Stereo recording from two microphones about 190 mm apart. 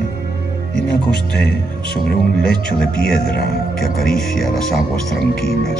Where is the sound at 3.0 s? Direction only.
55° left (ahead or behind).